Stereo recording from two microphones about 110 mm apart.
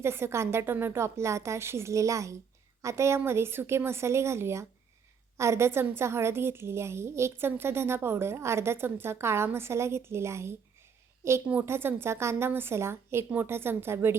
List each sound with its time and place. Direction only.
0.0 s a woman's voice: 25° right (ahead or behind)